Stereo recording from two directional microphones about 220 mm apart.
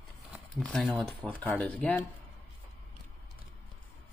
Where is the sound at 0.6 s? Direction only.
Centre (ahead or behind).